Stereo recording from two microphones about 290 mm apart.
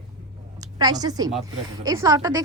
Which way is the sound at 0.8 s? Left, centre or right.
Centre.